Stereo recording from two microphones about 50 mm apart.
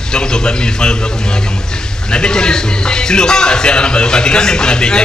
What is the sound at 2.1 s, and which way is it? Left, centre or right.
A man's voice, centre.